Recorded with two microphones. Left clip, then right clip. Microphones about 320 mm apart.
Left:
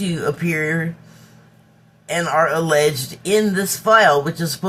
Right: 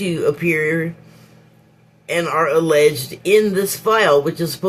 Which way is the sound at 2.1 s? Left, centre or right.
Centre.